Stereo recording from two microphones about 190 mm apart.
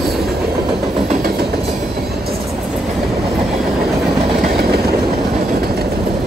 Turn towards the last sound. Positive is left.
turn(degrees=-55)  # may be behind; listen again after turning